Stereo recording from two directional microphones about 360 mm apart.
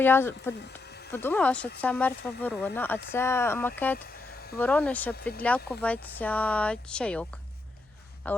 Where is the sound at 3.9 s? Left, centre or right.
Left.